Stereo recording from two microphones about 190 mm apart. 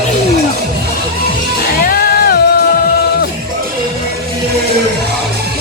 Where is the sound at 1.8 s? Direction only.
50° left (ahead or behind).